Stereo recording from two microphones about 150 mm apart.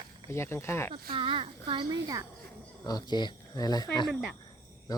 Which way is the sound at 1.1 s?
35° right (ahead or behind).